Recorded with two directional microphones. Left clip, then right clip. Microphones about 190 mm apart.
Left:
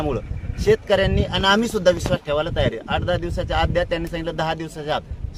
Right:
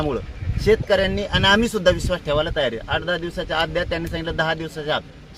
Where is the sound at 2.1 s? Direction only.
15° left (ahead or behind).